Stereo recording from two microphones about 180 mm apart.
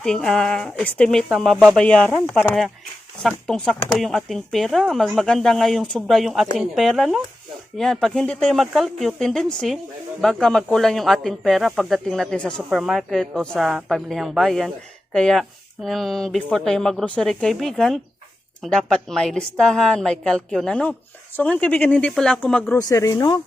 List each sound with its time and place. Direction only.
0.0 s speech: 5° left (ahead or behind)
22.8 s speech: 20° left (ahead or behind)